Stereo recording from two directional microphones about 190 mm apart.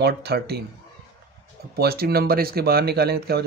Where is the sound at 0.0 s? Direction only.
55° right (ahead or behind).